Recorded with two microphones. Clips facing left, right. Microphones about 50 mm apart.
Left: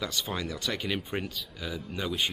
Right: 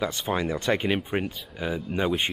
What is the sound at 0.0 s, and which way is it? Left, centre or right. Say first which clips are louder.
Speech: right 6 dB; right.